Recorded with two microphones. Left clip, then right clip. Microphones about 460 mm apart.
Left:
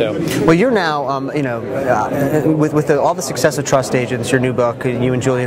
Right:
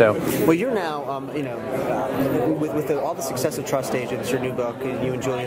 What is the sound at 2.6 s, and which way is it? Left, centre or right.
Speech, left.